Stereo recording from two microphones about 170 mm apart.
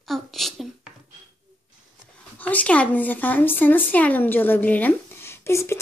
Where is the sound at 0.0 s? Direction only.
Centre (ahead or behind).